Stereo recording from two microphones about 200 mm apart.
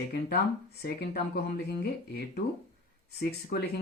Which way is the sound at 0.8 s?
50° left (ahead or behind).